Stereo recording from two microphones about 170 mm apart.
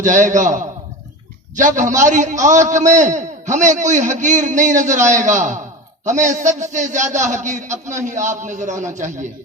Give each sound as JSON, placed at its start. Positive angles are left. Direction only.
{"t": 0.0, "sound": "a man's voice", "side_deg": -45}